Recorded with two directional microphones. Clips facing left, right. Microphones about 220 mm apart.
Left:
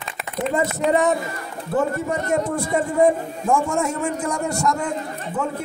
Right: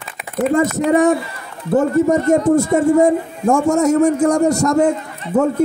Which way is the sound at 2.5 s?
45° right (ahead or behind).